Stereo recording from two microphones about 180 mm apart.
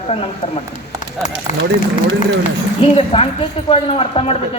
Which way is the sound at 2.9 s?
35° left (ahead or behind).